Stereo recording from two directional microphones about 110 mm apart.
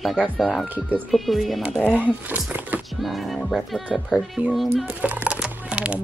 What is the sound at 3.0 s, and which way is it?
Speech, centre (ahead or behind).